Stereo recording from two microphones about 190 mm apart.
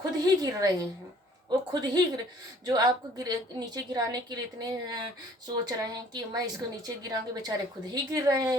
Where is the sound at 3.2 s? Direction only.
20° right (ahead or behind).